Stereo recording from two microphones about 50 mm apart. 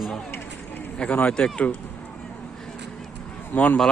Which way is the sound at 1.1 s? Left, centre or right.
Left.